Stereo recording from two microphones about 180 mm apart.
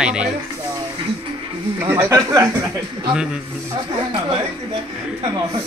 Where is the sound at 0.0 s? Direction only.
5° right (ahead or behind).